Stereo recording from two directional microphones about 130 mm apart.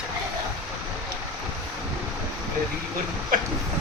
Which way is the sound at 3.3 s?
90° right.